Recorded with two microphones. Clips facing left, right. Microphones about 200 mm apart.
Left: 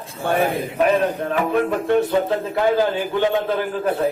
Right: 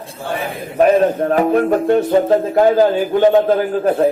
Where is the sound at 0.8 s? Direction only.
45° right (ahead or behind).